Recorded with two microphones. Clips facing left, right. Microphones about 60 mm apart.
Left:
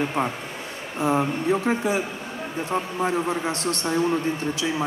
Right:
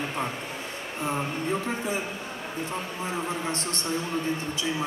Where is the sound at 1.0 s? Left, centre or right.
Left.